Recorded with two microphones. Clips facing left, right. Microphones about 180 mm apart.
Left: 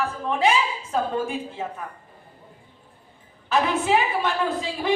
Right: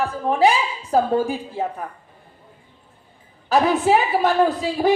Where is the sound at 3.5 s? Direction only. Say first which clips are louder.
Right 5 dB; 40° right (ahead or behind).